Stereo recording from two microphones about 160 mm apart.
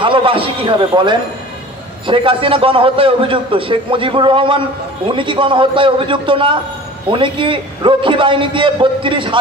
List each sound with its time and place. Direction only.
0.0 s a man's voice: 30° right (ahead or behind)